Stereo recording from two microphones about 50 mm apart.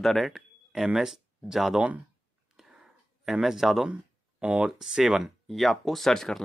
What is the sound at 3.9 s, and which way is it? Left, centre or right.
Speech, right.